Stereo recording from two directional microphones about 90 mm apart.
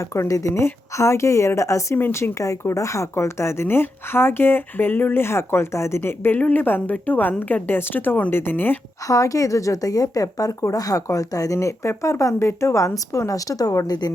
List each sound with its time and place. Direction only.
0.0 s a woman's voice: 30° left (ahead or behind)
2.4 s a woman's voice: 35° left (ahead or behind)
9.0 s speech: 40° left (ahead or behind)